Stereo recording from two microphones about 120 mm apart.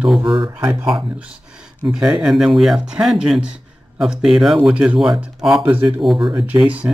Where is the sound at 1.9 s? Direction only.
5° right (ahead or behind).